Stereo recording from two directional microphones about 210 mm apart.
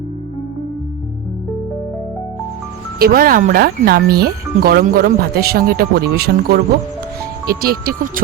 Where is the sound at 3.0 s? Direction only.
45° right (ahead or behind).